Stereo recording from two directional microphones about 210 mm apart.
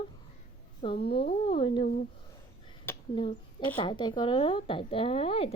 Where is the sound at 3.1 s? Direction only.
25° left (ahead or behind).